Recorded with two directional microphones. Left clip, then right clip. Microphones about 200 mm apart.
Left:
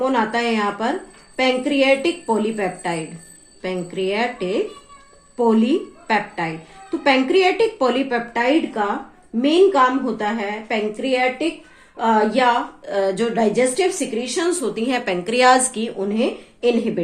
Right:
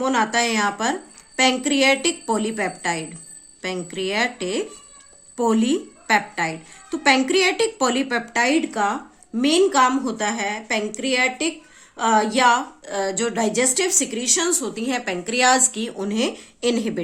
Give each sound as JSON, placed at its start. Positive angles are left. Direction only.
{"t": 0.0, "sound": "a woman's voice", "side_deg": -40}
{"t": 16.0, "sound": "a woman's voice", "side_deg": -35}